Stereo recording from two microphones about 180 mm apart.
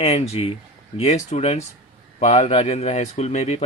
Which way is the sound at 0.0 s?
35° left (ahead or behind).